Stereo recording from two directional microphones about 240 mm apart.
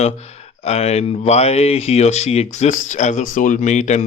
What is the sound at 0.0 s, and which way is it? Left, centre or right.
Speech, left.